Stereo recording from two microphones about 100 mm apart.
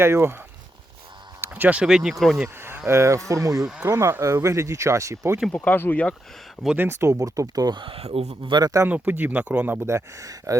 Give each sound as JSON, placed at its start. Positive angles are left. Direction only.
{"t": 0.0, "sound": "speech", "side_deg": -25}
{"t": 1.4, "sound": "speech", "side_deg": -20}
{"t": 2.6, "sound": "speech", "side_deg": -25}
{"t": 3.5, "sound": "speech", "side_deg": -5}
{"t": 3.8, "sound": "speech", "side_deg": -25}
{"t": 5.5, "sound": "speech", "side_deg": 20}
{"t": 6.7, "sound": "speech", "side_deg": -25}
{"t": 7.9, "sound": "speech", "side_deg": -80}
{"t": 8.4, "sound": "a man's voice", "side_deg": -50}
{"t": 8.9, "sound": "speech", "side_deg": -15}
{"t": 9.8, "sound": "speech", "side_deg": -30}